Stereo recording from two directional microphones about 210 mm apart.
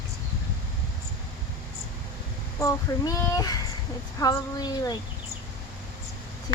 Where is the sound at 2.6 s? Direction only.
15° left (ahead or behind).